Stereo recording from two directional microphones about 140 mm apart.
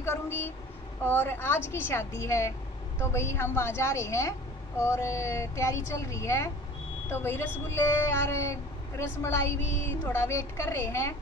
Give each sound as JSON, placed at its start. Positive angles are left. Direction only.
{"t": 0.0, "sound": "a woman's voice", "side_deg": 20}